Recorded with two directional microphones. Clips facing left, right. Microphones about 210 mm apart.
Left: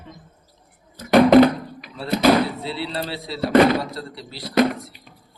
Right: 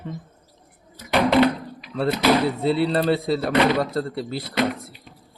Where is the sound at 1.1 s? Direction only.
45° left (ahead or behind).